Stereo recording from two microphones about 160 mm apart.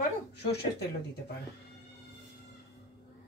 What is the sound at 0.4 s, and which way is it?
Speech, 90° left.